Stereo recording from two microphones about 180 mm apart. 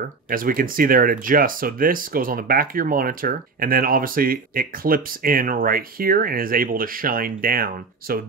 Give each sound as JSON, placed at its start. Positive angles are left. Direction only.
{"t": 0.3, "sound": "speech", "side_deg": -50}